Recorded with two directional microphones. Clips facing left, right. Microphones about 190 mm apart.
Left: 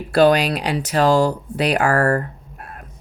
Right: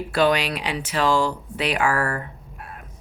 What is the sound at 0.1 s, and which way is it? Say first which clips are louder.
Speech: left 6 dB; 40° left (ahead or behind).